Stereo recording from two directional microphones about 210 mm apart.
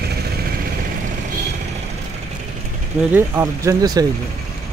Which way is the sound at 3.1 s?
10° right (ahead or behind).